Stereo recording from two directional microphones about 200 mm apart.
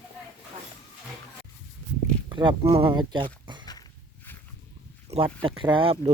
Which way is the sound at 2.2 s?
25° right (ahead or behind).